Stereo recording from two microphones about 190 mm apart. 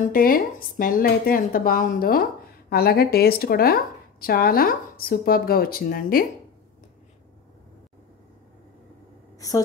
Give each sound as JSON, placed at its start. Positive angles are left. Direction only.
{"t": 0.1, "sound": "speech", "side_deg": 50}